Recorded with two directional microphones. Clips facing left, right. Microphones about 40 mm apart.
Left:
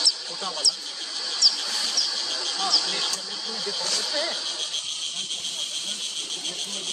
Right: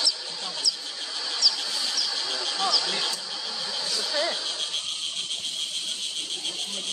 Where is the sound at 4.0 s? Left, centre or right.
Centre.